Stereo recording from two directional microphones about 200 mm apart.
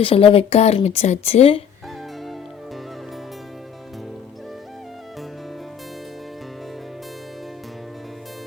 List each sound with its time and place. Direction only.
0.0 s speech: 25° left (ahead or behind)